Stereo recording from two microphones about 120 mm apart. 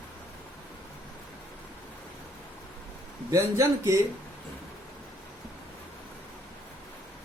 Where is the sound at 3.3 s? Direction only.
25° right (ahead or behind).